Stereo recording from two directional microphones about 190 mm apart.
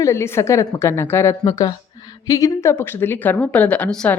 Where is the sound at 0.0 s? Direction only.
15° left (ahead or behind).